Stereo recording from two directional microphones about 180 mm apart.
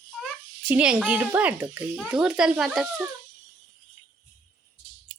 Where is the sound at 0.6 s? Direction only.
5° right (ahead or behind).